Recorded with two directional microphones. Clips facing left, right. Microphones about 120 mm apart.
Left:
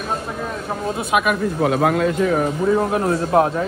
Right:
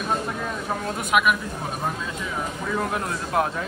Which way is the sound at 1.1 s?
30° left (ahead or behind).